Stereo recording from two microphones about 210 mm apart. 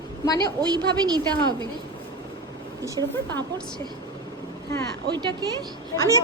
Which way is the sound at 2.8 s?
15° right (ahead or behind).